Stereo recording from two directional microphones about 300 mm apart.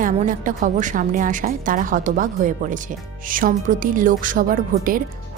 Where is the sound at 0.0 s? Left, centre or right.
Right.